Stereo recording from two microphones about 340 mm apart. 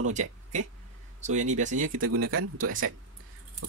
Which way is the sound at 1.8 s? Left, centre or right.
Right.